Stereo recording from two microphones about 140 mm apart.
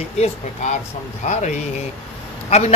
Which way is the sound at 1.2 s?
55° left (ahead or behind).